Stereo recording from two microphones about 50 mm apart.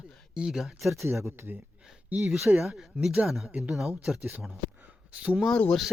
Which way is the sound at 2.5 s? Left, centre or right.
Centre.